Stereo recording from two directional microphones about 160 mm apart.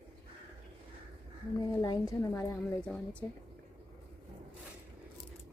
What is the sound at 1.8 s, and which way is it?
Speech, 25° left (ahead or behind).